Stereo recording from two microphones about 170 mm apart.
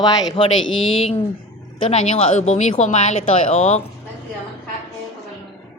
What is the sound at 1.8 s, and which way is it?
Speech, 40° left (ahead or behind).